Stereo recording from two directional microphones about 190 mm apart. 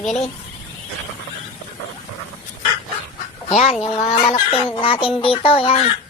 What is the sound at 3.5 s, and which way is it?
Speech, 35° left (ahead or behind).